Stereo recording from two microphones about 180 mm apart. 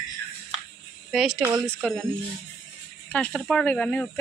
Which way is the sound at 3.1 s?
5° left (ahead or behind).